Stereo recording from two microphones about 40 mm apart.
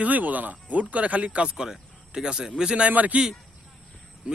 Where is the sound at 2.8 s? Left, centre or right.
Right.